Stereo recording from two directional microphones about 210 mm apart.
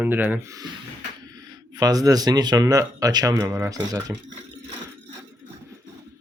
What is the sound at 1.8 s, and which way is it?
Speech, 15° right (ahead or behind).